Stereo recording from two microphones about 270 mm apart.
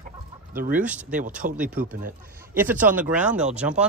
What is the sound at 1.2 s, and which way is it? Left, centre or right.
Speech, right.